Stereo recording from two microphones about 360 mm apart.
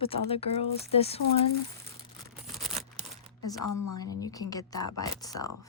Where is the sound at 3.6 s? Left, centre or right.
Left.